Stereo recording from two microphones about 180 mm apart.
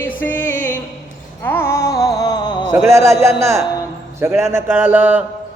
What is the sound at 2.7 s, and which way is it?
A man's voice, 15° right (ahead or behind).